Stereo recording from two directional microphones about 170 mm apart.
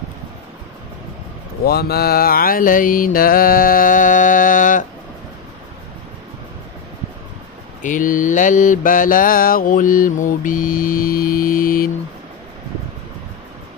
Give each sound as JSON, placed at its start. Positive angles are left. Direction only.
{"t": 1.6, "sound": "mantra", "side_deg": 70}
{"t": 7.8, "sound": "mantra", "side_deg": 50}